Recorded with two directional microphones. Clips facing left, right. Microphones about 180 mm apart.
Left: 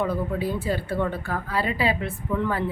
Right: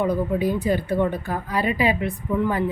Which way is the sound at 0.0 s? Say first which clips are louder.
Right 4 dB; 15° right (ahead or behind).